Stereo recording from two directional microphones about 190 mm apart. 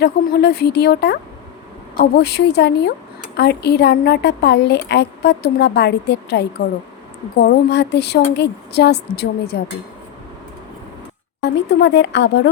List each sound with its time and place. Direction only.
0.0 s a woman's voice: 55° left (ahead or behind)
11.4 s a woman's voice: 65° left (ahead or behind)